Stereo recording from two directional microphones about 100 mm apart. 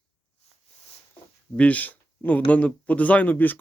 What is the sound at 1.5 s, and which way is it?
Speech, 15° left (ahead or behind).